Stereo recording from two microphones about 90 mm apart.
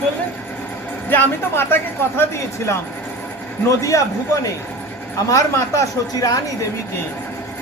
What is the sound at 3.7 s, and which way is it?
Speech, 35° left (ahead or behind).